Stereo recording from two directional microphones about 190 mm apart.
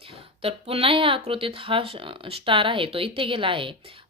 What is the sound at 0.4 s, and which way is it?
Speech, 30° right (ahead or behind).